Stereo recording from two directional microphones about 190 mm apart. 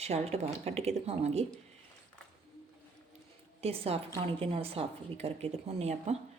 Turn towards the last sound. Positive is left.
turn(degrees=-35)  # may be behind; listen again after turning